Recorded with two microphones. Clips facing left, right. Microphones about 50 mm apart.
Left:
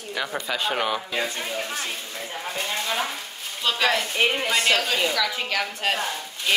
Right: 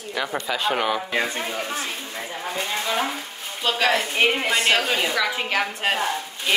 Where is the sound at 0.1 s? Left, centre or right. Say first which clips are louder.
Right 2 dB; centre.